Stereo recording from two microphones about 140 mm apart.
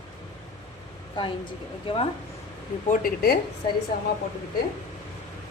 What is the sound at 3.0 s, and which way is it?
Speech, 90° left.